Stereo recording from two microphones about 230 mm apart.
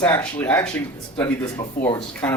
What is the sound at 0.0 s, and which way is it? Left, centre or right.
Speech, centre.